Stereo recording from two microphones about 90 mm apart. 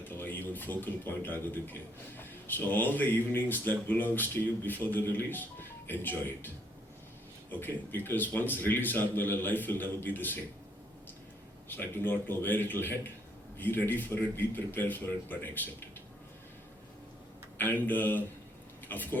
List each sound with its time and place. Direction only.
0.1 s speech: 20° left (ahead or behind)
7.5 s speech: 20° left (ahead or behind)
12.0 s speech: 20° left (ahead or behind)
17.6 s speech: 20° left (ahead or behind)